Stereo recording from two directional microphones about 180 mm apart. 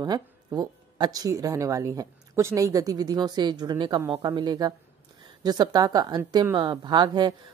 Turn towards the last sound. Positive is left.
turn(degrees=-25)  # may be behind; listen again after turning